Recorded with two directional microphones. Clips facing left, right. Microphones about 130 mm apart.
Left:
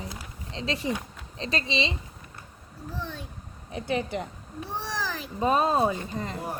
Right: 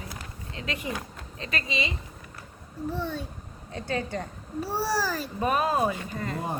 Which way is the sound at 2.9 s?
10° right (ahead or behind).